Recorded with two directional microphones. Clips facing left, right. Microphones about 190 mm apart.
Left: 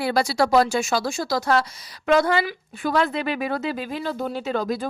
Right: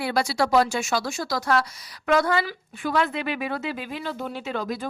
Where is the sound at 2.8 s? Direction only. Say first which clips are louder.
Left 2 dB; 40° left (ahead or behind).